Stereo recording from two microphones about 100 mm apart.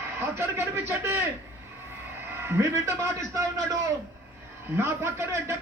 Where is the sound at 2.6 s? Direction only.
30° right (ahead or behind).